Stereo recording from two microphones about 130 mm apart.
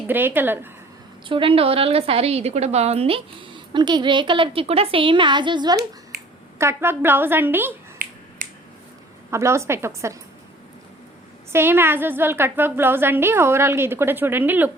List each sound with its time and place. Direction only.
0.1 s a woman's voice: 15° right (ahead or behind)
1.3 s a woman's voice: 45° right (ahead or behind)
6.6 s a woman's voice: 20° right (ahead or behind)
8.4 s finger snapping: 90° right
9.3 s a woman's voice: 20° right (ahead or behind)
11.5 s a woman's voice: 15° right (ahead or behind)